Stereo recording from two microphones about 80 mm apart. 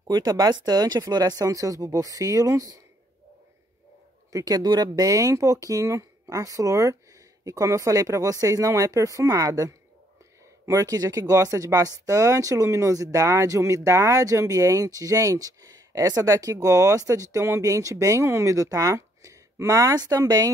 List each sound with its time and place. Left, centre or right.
0.0 s speech: right
4.3 s speech: right